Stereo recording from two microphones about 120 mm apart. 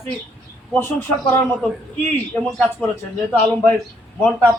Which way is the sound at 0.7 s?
20° left (ahead or behind).